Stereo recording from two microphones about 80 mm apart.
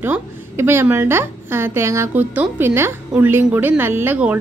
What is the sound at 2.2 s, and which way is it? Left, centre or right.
A woman's voice, right.